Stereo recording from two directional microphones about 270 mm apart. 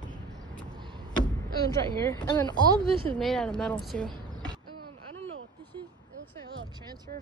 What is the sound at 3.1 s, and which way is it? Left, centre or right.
Speech, centre.